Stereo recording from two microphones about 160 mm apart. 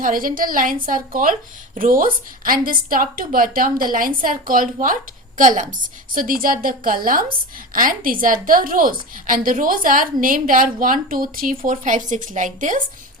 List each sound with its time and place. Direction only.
0.0 s a woman's voice: 60° right (ahead or behind)